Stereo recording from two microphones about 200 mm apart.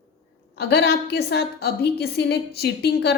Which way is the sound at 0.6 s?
55° left (ahead or behind).